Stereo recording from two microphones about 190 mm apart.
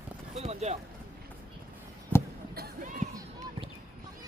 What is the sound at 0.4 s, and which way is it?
Speech, 35° right (ahead or behind).